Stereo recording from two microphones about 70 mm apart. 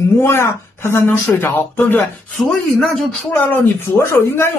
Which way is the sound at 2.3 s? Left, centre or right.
Centre.